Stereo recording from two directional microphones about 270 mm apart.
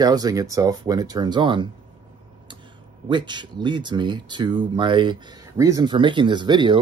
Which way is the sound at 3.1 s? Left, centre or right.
Centre.